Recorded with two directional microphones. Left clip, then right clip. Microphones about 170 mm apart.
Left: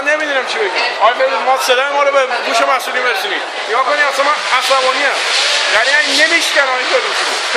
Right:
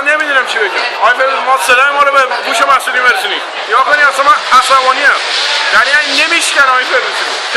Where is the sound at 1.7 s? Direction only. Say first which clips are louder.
Right 7 dB; 20° left (ahead or behind).